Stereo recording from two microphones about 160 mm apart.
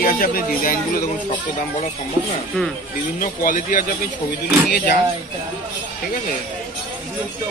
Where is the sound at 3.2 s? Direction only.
55° left (ahead or behind).